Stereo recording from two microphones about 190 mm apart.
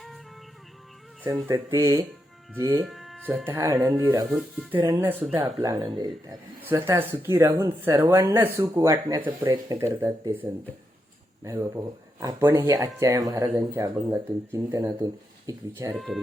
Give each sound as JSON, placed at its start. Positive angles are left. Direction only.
{"t": 1.2, "sound": "speech", "side_deg": -15}
{"t": 2.8, "sound": "speech", "side_deg": 0}
{"t": 4.3, "sound": "speech", "side_deg": 0}
{"t": 4.8, "sound": "speech", "side_deg": -20}
{"t": 6.2, "sound": "speech", "side_deg": -10}
{"t": 11.4, "sound": "speech", "side_deg": -20}
{"t": 16.0, "sound": "speech", "side_deg": 0}